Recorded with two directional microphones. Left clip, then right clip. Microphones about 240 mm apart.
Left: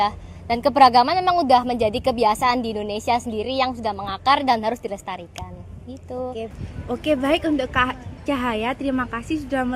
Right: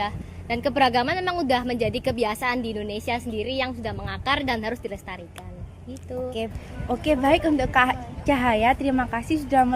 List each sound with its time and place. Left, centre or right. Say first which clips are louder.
0.0 s a woman's voice: left 7 dB; left
6.8 s a woman's voice: even; centre